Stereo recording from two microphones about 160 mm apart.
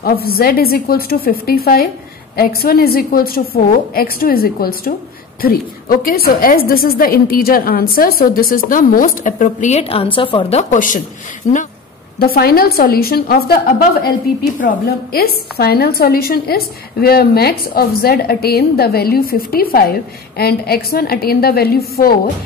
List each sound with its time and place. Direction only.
0.0 s a woman's voice: 70° left (ahead or behind); by 10.6 s 35° left (ahead or behind)
10.6 s a woman's voice: 55° left (ahead or behind)
12.2 s a woman's voice: 75° left (ahead or behind)